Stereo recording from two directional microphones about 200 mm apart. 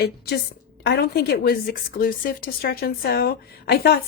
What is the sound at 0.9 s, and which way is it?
Speech, 55° left (ahead or behind).